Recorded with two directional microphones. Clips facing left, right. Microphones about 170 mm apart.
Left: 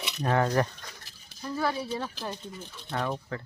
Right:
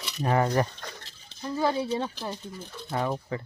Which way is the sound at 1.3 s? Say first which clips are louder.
Right 3 dB; 25° right (ahead or behind).